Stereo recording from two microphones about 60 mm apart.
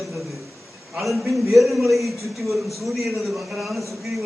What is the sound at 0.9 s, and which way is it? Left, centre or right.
A man's voice, centre.